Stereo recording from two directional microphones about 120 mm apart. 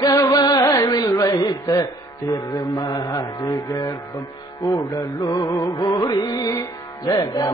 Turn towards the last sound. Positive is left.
turn(degrees=30)  # may be behind; listen again after turning